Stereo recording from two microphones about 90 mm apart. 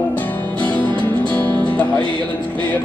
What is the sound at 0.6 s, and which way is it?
Music, 15° left (ahead or behind).